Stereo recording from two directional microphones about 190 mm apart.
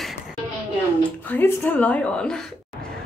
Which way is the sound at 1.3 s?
10° left (ahead or behind).